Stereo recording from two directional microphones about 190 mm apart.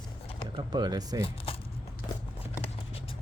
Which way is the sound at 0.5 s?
20° right (ahead or behind).